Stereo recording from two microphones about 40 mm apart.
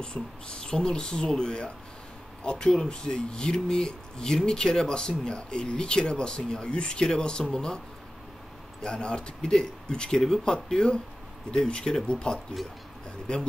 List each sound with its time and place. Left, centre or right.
0.0 s speech: left
8.8 s speech: left